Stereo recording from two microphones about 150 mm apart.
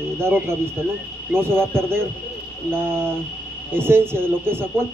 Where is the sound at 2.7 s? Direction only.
15° right (ahead or behind).